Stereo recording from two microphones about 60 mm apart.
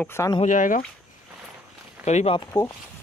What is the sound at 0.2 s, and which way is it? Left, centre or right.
Speech, left.